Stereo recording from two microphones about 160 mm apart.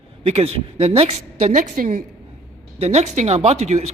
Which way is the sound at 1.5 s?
60° right (ahead or behind).